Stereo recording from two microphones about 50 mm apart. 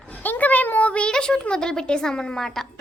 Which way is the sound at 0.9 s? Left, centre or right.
Left.